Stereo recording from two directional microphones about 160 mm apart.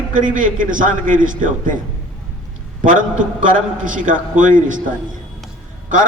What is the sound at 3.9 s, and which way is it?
Speech, 55° right (ahead or behind).